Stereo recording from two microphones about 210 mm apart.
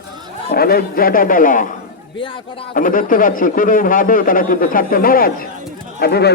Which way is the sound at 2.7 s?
40° left (ahead or behind).